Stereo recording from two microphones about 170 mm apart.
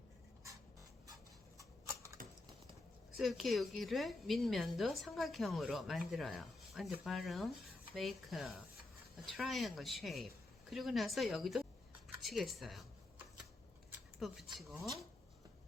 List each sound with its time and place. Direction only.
1.5 s a sound: 20° right (ahead or behind)
3.2 s a woman's voice: centre (ahead or behind)
14.2 s a woman's voice: centre (ahead or behind)